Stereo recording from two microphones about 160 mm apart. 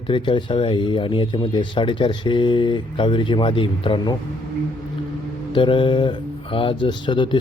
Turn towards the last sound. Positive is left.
turn(degrees=30)  # may be behind; listen again after turning